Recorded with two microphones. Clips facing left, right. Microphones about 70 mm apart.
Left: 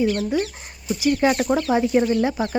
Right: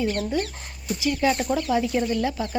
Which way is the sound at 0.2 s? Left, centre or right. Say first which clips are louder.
Left 3 dB; left.